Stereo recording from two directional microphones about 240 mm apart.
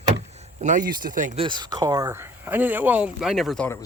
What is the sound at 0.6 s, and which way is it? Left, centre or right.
Speech, right.